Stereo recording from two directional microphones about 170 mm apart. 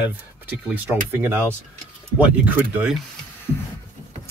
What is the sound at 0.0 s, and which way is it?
Speech, 10° right (ahead or behind).